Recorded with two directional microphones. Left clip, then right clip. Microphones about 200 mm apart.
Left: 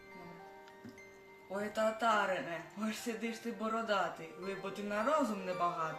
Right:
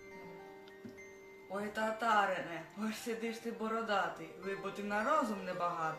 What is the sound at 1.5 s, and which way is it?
Speech, 10° right (ahead or behind).